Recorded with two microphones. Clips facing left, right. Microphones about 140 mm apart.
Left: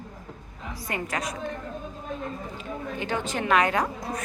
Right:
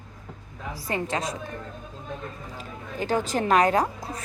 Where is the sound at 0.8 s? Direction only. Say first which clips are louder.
Right 3 dB; 30° right (ahead or behind).